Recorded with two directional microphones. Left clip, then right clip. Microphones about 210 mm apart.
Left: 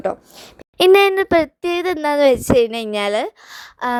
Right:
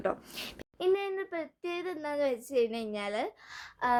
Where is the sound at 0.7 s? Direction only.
50° left (ahead or behind); by 4.0 s 30° left (ahead or behind).